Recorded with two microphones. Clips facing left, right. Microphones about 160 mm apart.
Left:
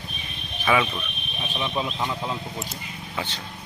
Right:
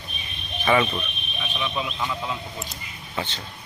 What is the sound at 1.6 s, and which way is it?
Speech, 30° left (ahead or behind).